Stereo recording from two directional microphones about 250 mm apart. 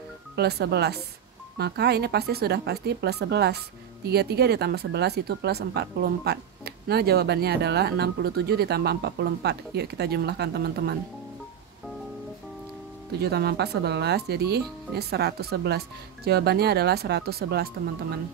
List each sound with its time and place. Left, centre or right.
0.4 s speech: right
13.2 s speech: right